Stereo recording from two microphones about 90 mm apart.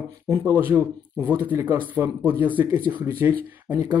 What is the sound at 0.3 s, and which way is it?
Speech, 25° right (ahead or behind).